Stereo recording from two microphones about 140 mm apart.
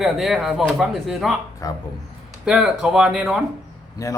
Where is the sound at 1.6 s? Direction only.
25° left (ahead or behind).